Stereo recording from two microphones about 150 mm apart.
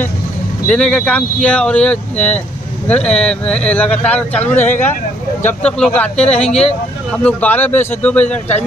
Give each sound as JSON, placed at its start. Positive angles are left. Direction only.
{"t": 0.7, "sound": "speech", "side_deg": 5}
{"t": 6.2, "sound": "speech", "side_deg": 45}
{"t": 7.2, "sound": "speech", "side_deg": 10}